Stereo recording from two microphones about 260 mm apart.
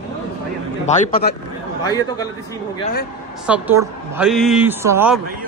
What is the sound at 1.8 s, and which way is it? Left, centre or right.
Speech, centre.